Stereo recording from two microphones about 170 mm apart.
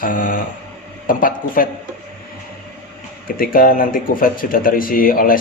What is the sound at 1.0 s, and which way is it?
Speech, 55° left (ahead or behind).